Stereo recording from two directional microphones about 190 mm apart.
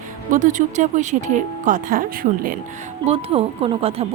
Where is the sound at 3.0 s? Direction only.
30° right (ahead or behind).